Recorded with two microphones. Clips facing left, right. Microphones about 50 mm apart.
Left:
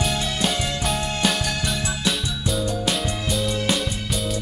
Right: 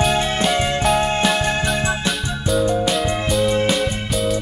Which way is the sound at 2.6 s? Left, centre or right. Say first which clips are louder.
Right 10 dB; right.